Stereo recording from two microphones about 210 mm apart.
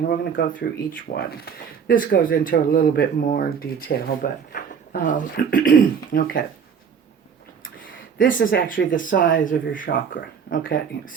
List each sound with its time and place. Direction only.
0.7 s speech: 45° left (ahead or behind)
7.6 s a sound: 40° left (ahead or behind)
8.9 s speech: 40° left (ahead or behind)